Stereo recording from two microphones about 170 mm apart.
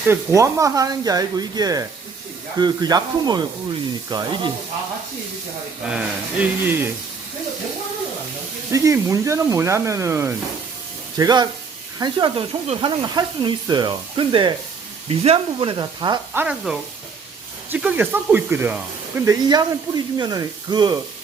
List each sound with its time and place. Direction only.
0.0 s speech: 15° right (ahead or behind)
5.8 s speech: 5° right (ahead or behind)
8.7 s speech: 15° right (ahead or behind)
16.3 s sizzle: 10° right (ahead or behind)
17.7 s speech: 10° right (ahead or behind)
19.2 s speech: 20° right (ahead or behind)